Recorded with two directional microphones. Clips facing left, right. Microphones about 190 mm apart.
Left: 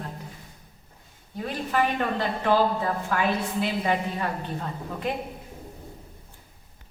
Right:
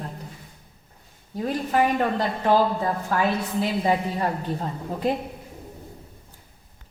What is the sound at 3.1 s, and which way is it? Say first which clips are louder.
A woman's voice: right 2 dB; 35° right (ahead or behind).